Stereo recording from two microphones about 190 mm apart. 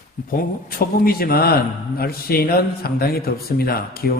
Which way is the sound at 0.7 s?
50° left (ahead or behind).